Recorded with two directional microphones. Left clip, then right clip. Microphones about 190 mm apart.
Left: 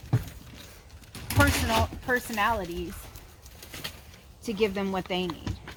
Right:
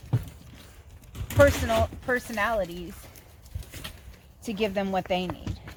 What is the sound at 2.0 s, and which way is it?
Speech, 40° right (ahead or behind).